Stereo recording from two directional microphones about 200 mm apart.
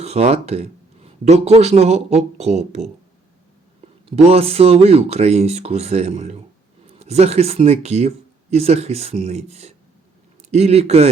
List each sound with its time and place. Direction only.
0.0 s speech: 30° right (ahead or behind)
4.1 s speech: 30° right (ahead or behind)